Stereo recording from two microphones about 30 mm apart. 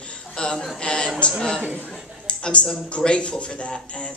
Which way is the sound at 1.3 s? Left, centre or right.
Centre.